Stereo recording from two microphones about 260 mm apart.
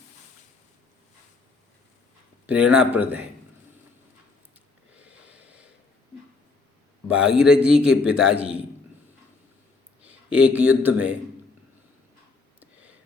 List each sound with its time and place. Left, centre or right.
2.5 s a man's voice: centre
5.0 s wheeze: centre
7.1 s a man's voice: centre
10.0 s a man's voice: centre